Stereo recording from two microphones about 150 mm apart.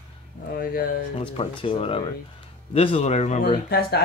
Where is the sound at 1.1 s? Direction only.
40° left (ahead or behind).